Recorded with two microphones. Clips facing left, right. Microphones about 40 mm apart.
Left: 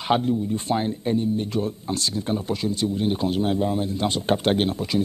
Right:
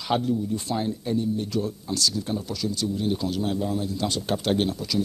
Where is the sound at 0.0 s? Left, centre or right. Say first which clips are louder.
Left 3 dB; left.